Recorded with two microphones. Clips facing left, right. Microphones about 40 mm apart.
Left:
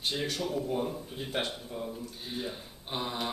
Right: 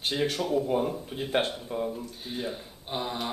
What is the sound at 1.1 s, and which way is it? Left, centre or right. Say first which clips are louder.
Speech: right 6 dB; right.